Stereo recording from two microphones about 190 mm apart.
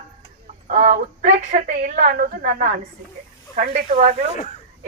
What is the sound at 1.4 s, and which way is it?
A woman's voice, 40° right (ahead or behind).